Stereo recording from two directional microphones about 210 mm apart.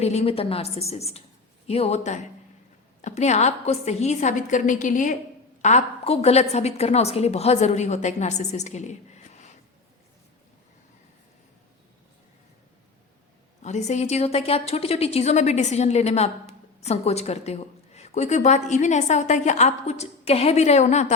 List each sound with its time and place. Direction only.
0.0 s a woman's voice: 30° left (ahead or behind)
13.6 s a woman's voice: 35° left (ahead or behind)